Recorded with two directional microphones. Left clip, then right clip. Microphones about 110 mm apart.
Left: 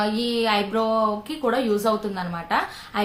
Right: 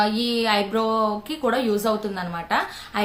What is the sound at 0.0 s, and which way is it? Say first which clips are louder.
A woman's voice: right 1 dB; 15° right (ahead or behind).